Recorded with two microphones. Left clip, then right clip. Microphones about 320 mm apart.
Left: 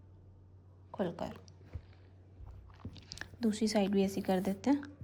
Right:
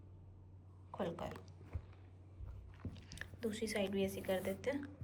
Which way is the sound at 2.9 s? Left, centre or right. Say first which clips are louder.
Left 6 dB; centre.